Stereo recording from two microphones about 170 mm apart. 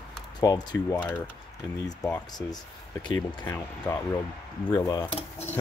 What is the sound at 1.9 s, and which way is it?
Speech, 20° left (ahead or behind).